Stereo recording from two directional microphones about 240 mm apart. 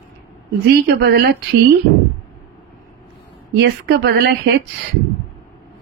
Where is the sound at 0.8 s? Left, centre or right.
Right.